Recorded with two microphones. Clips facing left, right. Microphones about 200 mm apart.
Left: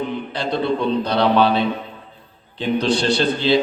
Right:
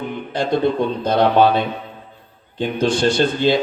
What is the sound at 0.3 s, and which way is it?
A man's voice, 45° right (ahead or behind).